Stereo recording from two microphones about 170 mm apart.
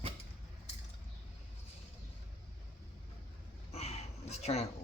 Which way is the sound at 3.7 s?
40° left (ahead or behind).